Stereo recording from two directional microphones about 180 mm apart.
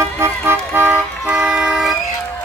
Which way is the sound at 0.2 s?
10° right (ahead or behind).